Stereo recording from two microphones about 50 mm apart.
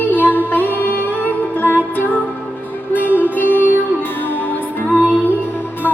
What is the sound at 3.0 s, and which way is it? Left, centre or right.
Music, right.